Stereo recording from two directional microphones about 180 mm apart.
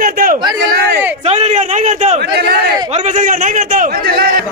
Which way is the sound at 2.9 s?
45° right (ahead or behind).